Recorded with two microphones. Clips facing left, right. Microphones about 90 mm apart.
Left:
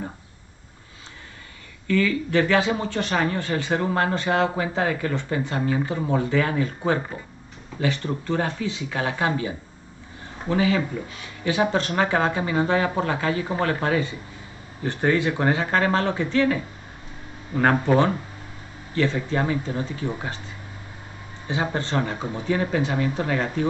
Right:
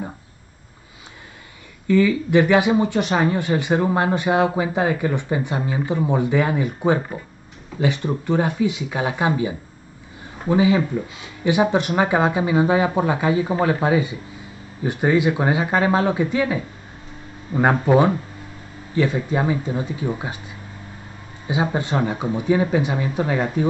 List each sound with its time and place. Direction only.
1.9 s speech: 15° right (ahead or behind)
21.5 s speech: 15° right (ahead or behind)